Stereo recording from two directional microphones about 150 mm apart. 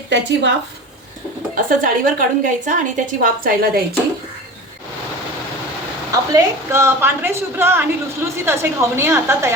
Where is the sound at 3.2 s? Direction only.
75° right (ahead or behind).